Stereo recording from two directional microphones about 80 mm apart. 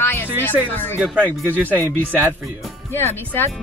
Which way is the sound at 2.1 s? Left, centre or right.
Right.